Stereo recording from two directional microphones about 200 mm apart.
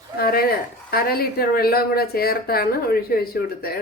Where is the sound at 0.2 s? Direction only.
50° left (ahead or behind).